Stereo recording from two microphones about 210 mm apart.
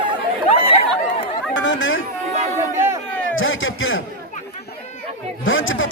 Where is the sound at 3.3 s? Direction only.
70° left (ahead or behind).